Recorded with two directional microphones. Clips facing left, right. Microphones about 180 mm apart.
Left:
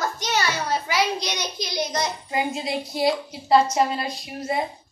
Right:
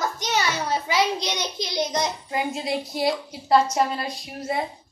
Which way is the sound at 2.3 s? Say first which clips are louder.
Even; 5° left (ahead or behind).